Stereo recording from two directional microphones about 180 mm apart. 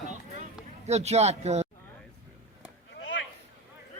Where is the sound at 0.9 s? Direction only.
40° right (ahead or behind).